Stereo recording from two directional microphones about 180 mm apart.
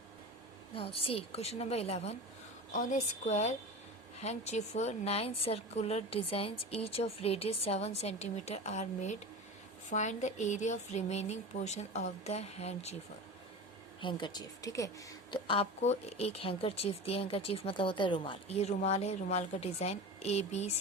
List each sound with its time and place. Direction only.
0.8 s speech: 30° left (ahead or behind)
14.0 s a woman's voice: 25° left (ahead or behind)
15.3 s speech: 30° left (ahead or behind)